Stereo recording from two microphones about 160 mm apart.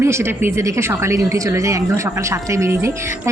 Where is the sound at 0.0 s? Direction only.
15° right (ahead or behind).